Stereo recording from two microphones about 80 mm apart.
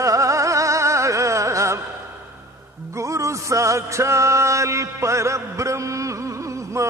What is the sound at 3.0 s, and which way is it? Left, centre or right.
Music, right.